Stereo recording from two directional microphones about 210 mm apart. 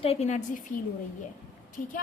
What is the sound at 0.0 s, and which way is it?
Speech, 30° left (ahead or behind).